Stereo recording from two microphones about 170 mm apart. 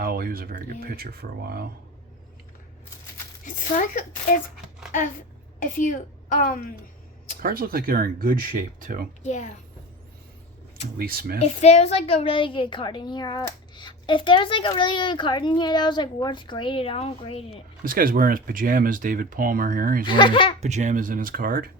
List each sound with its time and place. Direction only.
0.0 s speech: 60° right (ahead or behind)
3.4 s a woman's voice: 50° left (ahead or behind)
7.4 s speech: 60° right (ahead or behind)
9.2 s speech: 45° left (ahead or behind)
10.9 s speech: 60° right (ahead or behind)
11.3 s a woman's voice: 40° left (ahead or behind)
17.8 s speech: 55° right (ahead or behind)
20.1 s a woman's voice: 30° left (ahead or behind)
20.6 s speech: 45° right (ahead or behind)